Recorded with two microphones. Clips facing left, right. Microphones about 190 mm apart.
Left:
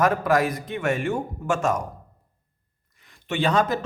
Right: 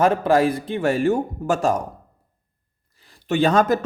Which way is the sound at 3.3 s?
45° right (ahead or behind).